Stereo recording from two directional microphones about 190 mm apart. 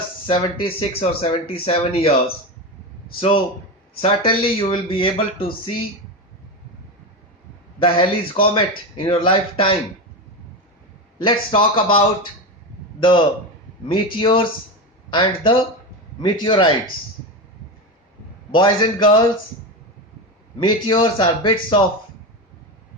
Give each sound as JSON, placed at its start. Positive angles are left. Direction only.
{"t": 0.3, "sound": "speech", "side_deg": 25}
{"t": 3.2, "sound": "speech", "side_deg": 30}
{"t": 7.8, "sound": "speech", "side_deg": 30}
{"t": 11.2, "sound": "speech", "side_deg": 25}
{"t": 18.5, "sound": "speech", "side_deg": 25}
{"t": 20.6, "sound": "speech", "side_deg": 25}